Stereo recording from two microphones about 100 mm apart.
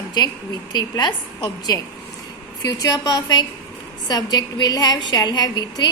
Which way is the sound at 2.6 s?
40° left (ahead or behind).